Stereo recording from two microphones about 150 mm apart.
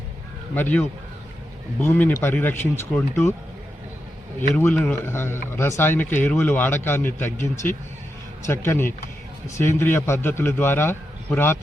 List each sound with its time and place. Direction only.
0.5 s a man's voice: 10° left (ahead or behind)
4.4 s a man's voice: 10° left (ahead or behind)